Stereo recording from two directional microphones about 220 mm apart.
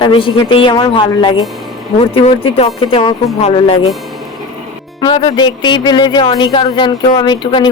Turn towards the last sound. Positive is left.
turn(degrees=20)  # may be behind; listen again after turning